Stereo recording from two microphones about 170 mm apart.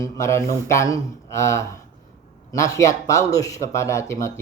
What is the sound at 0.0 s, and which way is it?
Speech, 15° left (ahead or behind).